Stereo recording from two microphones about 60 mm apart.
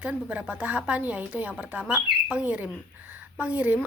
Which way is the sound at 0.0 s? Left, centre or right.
Right.